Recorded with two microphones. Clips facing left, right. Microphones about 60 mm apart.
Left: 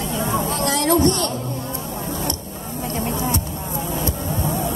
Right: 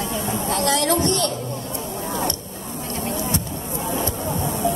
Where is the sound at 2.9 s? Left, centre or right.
Left.